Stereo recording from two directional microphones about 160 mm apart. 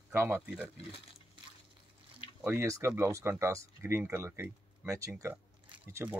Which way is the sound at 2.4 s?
15° right (ahead or behind).